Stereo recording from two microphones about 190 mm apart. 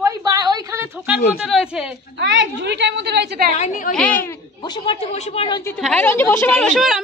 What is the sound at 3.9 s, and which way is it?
Speech, 10° left (ahead or behind).